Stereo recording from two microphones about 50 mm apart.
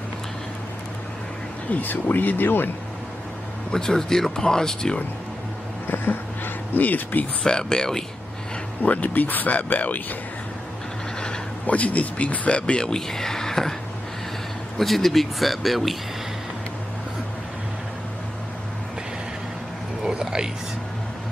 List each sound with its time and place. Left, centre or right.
1.7 s speech: left
3.7 s speech: centre
5.9 s speech: left
7.4 s speech: centre
8.8 s speech: left
11.6 s speech: left; by 13.7 s centre
14.8 s speech: centre
20.0 s a sound: centre